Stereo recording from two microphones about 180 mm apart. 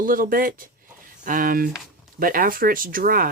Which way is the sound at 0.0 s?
50° right (ahead or behind).